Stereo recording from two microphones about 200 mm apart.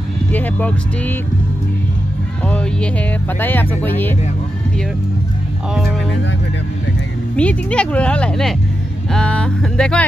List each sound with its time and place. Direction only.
0.3 s speech: 10° left (ahead or behind)
2.4 s speech: 5° left (ahead or behind)
7.3 s speech: 5° left (ahead or behind)